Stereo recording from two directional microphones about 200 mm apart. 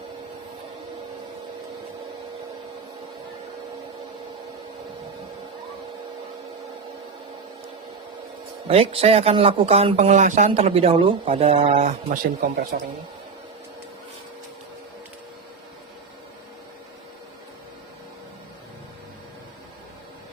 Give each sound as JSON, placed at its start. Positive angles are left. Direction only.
{"t": 8.6, "sound": "speech", "side_deg": -30}